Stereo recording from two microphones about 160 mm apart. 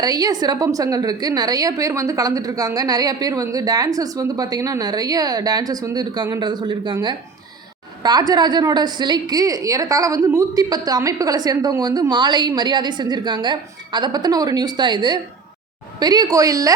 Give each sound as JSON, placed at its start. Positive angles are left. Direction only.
{"t": 0.0, "sound": "a woman's voice", "side_deg": -25}